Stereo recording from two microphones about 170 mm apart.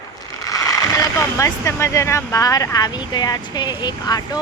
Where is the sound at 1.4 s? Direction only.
15° left (ahead or behind).